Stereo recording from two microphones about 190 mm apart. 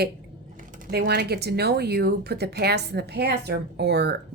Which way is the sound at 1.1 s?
60° right (ahead or behind).